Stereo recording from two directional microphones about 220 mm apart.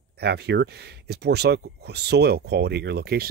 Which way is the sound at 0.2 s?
50° right (ahead or behind).